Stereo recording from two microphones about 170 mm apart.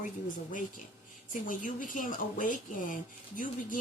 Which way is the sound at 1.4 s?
50° left (ahead or behind).